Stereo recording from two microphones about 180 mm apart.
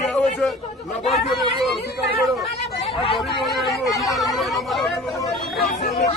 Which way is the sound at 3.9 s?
20° left (ahead or behind).